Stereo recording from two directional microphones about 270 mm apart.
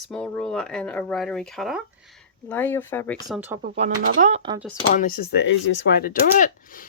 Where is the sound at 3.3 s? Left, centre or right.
Centre.